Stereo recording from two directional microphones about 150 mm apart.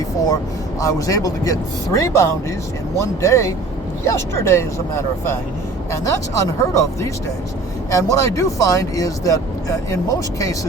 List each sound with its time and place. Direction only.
0.8 s speech: 20° left (ahead or behind)